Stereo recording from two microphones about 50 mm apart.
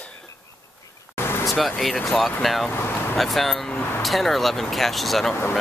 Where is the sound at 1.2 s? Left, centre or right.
Left.